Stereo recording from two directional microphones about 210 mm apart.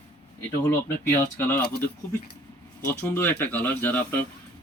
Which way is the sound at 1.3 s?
10° left (ahead or behind).